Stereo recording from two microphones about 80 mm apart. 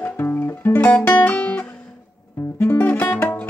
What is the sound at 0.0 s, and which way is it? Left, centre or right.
Music, left.